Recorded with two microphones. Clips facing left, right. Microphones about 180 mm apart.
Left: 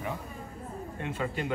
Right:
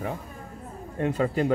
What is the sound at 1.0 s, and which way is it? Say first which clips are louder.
Speech: right 9 dB; 40° right (ahead or behind).